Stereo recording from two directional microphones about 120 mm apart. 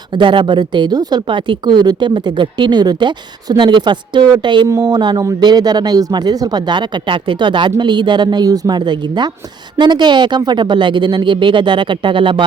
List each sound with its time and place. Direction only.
0.1 s speech: 40° right (ahead or behind)